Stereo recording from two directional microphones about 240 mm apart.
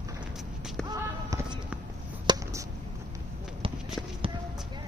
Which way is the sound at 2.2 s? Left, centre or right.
Centre.